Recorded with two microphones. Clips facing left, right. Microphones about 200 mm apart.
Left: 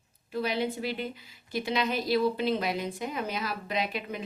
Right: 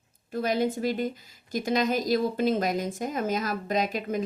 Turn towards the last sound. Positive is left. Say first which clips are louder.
# right 5 dB
turn(degrees=-45)  # may be behind; listen again after turning